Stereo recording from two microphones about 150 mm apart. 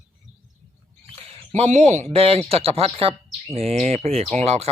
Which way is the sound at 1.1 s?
40° right (ahead or behind).